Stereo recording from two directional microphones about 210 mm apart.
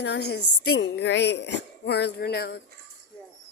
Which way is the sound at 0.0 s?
55° left (ahead or behind).